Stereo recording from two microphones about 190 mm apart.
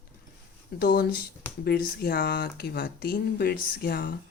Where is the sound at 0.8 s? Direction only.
50° left (ahead or behind).